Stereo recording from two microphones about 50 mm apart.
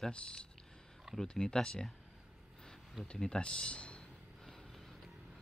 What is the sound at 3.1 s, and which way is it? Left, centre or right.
Speech, centre.